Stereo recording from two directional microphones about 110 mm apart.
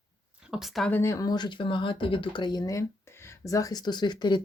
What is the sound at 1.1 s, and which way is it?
Speech, 35° left (ahead or behind).